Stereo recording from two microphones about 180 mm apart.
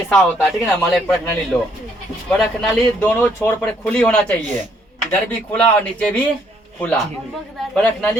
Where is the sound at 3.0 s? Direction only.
15° left (ahead or behind).